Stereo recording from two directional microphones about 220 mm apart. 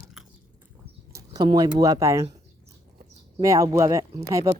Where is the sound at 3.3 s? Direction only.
15° right (ahead or behind).